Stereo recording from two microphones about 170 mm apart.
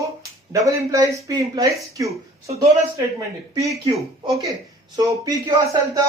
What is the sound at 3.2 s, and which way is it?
Speech, 20° right (ahead or behind).